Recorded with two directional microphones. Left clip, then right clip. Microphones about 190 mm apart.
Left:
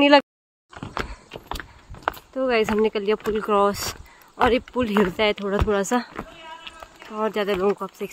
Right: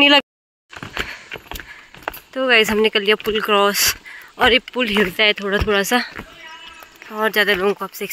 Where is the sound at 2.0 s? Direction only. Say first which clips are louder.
Right 5 dB; 5° right (ahead or behind).